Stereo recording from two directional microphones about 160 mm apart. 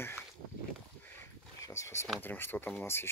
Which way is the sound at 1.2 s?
20° left (ahead or behind).